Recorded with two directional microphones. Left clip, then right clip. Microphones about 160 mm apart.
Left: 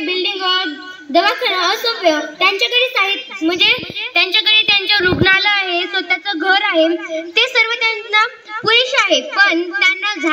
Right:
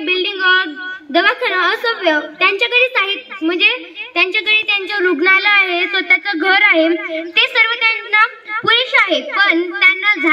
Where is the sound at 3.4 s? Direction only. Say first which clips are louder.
Even; 45° left (ahead or behind).